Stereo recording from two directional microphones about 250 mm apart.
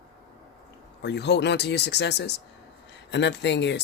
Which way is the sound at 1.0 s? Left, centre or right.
Left.